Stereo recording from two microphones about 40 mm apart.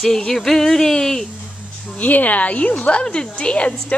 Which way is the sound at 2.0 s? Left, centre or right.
Left.